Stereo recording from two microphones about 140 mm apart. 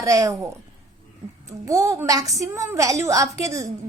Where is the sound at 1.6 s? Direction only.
20° right (ahead or behind).